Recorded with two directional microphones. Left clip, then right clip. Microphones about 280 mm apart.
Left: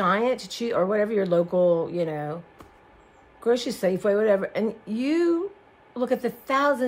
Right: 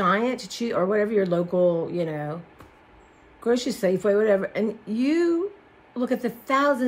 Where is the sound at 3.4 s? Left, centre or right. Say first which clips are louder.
Even; centre.